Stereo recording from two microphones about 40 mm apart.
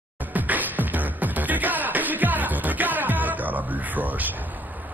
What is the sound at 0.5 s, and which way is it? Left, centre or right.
Music, right.